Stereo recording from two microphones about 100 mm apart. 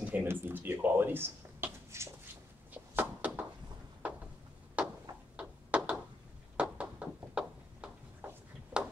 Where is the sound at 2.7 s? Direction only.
15° right (ahead or behind).